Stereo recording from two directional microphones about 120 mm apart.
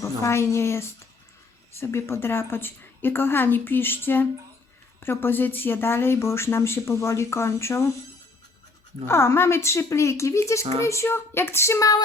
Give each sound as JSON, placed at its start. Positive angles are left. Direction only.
{"t": 0.0, "sound": "a woman's voice", "side_deg": 25}
{"t": 9.0, "sound": "a woman's voice", "side_deg": 20}